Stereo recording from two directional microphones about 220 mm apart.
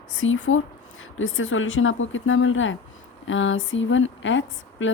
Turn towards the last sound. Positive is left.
turn(degrees=60)  # may be behind; listen again after turning